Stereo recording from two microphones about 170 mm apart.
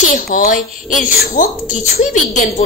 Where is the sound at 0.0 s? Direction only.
50° left (ahead or behind).